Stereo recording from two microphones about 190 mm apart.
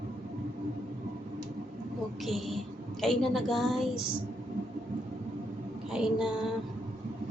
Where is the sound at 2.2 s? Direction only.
Centre (ahead or behind).